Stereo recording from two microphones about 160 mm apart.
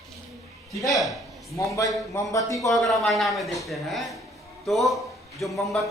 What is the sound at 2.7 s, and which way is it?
A man's voice, centre (ahead or behind).